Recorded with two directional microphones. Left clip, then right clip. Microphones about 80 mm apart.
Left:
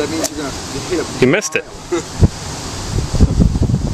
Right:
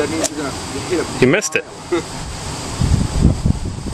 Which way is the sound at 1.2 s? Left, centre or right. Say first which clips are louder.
Left 1 dB; centre.